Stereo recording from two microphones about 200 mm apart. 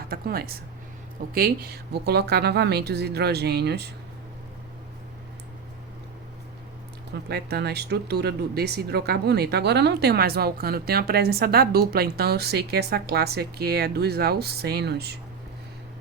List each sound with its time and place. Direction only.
0.1 s speech: 50° right (ahead or behind)
7.1 s speech: 55° right (ahead or behind)